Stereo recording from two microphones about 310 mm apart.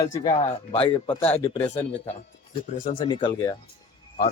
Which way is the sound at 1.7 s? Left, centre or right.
Left.